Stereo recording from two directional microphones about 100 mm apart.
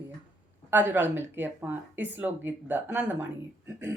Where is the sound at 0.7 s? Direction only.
20° right (ahead or behind).